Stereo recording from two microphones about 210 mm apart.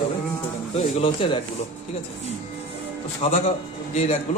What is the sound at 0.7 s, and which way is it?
Speech, 30° left (ahead or behind).